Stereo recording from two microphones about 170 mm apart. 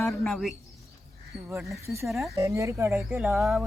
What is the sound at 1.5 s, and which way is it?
Speech, 15° right (ahead or behind).